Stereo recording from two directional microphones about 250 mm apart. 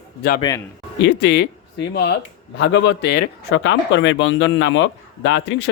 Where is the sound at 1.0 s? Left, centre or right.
Left.